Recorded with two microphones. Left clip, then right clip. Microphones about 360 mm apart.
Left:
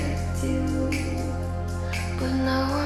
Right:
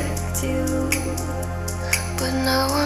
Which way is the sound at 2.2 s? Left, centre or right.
Right.